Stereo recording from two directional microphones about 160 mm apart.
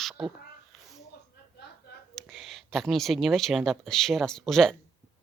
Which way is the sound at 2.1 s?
Centre (ahead or behind).